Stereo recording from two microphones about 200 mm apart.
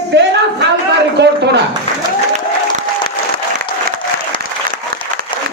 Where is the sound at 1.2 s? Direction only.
60° right (ahead or behind).